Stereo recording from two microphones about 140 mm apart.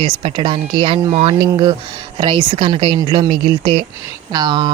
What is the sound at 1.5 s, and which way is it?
Speech, 35° right (ahead or behind).